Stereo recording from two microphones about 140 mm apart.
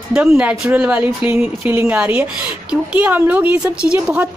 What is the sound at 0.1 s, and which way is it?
A woman's voice, 10° right (ahead or behind).